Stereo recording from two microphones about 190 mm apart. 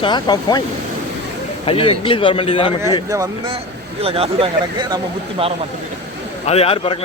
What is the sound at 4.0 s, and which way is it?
Speech, 30° right (ahead or behind).